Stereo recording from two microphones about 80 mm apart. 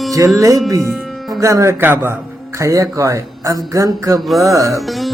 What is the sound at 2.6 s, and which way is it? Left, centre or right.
A man's voice, right.